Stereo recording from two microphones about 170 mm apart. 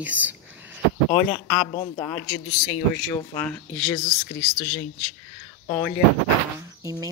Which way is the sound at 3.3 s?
10° left (ahead or behind).